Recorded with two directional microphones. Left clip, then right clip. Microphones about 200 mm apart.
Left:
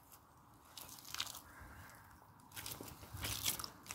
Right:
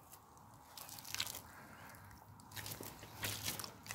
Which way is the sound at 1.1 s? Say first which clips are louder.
Right 1 dB; 20° right (ahead or behind).